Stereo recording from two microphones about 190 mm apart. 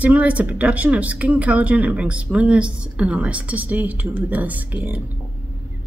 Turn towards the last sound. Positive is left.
turn(degrees=-10)  # may be behind; listen again after turning